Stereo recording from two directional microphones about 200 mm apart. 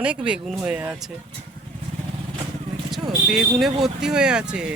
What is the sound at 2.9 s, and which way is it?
Speech, centre (ahead or behind).